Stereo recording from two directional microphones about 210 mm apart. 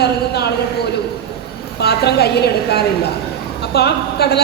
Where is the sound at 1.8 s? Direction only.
50° left (ahead or behind).